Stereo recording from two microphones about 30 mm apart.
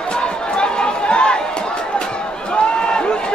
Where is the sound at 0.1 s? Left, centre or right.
Left.